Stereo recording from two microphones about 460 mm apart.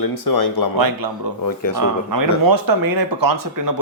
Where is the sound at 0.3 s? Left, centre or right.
Left.